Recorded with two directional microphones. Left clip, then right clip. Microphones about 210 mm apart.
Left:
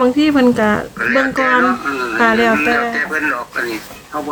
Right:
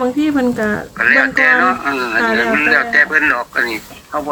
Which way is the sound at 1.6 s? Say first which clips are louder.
Right 1 dB; 45° right (ahead or behind).